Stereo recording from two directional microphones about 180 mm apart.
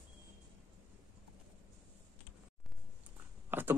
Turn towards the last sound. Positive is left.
turn(degrees=-10)  # may be behind; listen again after turning